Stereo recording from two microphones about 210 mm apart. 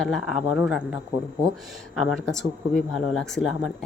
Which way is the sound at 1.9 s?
Centre (ahead or behind).